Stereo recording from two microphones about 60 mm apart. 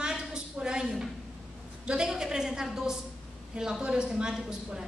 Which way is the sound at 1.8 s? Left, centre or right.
Centre.